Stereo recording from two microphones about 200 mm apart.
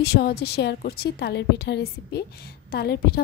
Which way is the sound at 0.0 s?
55° left (ahead or behind).